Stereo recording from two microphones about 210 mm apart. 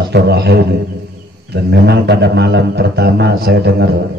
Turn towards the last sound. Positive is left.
turn(degrees=-50)  # may be behind; listen again after turning